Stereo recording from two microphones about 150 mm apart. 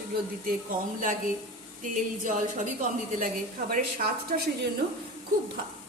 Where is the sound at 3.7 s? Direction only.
70° right (ahead or behind).